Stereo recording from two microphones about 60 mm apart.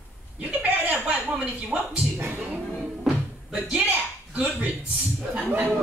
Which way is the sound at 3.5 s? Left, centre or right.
Centre.